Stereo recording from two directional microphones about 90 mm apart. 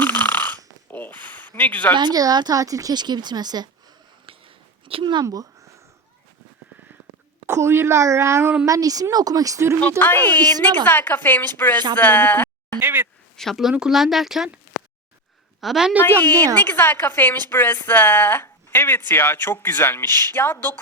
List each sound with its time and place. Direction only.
0.0 s a sound: 20° left (ahead or behind)
2.0 s speech: 50° right (ahead or behind)
4.3 s a sound: 90° right; by 5.2 s 75° right (ahead or behind)
5.2 s speech: 40° right (ahead or behind)
7.4 s speech: 30° right (ahead or behind)
10.0 s speech: 20° left (ahead or behind)
11.9 s a sound: 20° left (ahead or behind)
12.8 s speech: 20° right (ahead or behind)
13.3 s speech: 5° left (ahead or behind)
15.6 s speech: 5° right (ahead or behind)
16.0 s speech: 20° left (ahead or behind)
16.4 s speech: 50° right (ahead or behind)
16.7 s speech: 25° left (ahead or behind)